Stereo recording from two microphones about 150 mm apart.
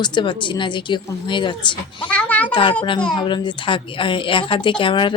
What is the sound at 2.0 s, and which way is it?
Speech, 10° left (ahead or behind).